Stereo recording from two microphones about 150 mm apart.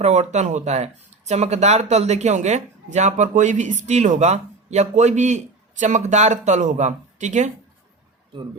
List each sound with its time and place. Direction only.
0.0 s speech: 50° right (ahead or behind)